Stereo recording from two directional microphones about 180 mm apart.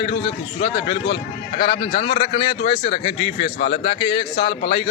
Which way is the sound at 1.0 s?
65° left (ahead or behind).